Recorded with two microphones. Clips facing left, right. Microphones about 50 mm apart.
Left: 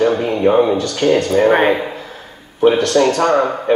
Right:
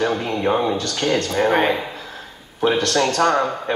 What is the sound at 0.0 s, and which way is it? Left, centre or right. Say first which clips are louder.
A woman's voice: left 6 dB; left.